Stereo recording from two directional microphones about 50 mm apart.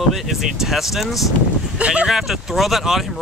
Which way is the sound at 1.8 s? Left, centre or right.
Right.